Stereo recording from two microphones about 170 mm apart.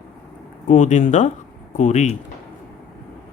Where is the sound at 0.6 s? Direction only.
45° left (ahead or behind).